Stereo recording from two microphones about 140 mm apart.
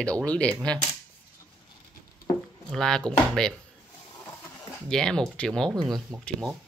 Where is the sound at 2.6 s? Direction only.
5° left (ahead or behind).